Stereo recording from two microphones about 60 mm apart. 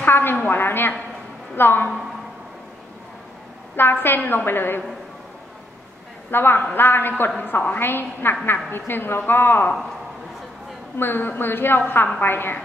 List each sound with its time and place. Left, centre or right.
0.0 s a sound: left
1.6 s a woman's voice: left
3.7 s a woman's voice: left
6.3 s a woman's voice: left
11.0 s a woman's voice: left